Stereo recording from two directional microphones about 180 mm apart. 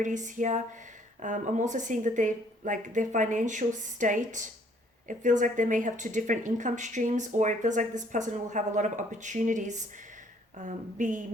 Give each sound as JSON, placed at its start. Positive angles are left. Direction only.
{"t": 0.0, "sound": "speech", "side_deg": -45}